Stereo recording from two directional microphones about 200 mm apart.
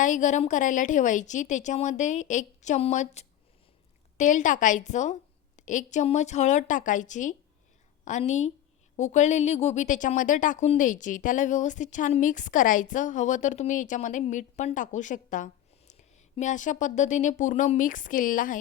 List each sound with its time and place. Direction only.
0.0 s a woman's voice: 40° left (ahead or behind)